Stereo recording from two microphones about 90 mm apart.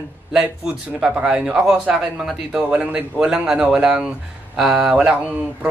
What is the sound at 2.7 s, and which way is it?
Speech, 15° right (ahead or behind).